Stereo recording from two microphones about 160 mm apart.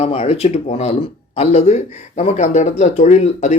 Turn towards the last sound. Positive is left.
turn(degrees=45)  # may be behind; listen again after turning